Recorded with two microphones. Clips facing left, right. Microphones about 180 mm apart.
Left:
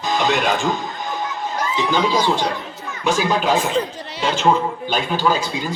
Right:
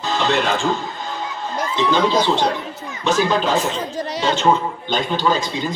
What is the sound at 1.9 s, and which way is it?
Speech, 10° left (ahead or behind).